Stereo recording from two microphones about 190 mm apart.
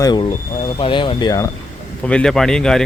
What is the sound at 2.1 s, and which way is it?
Speech, 5° left (ahead or behind).